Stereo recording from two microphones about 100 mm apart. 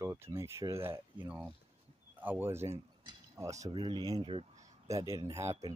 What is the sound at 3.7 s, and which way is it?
Speech, 50° right (ahead or behind).